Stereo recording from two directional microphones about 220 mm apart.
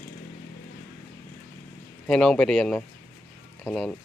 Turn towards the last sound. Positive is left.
turn(degrees=0)  # may be behind; listen again after turning